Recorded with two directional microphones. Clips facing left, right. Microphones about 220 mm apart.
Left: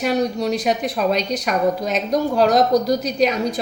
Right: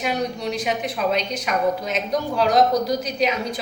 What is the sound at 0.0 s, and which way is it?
A woman's voice, 40° left (ahead or behind).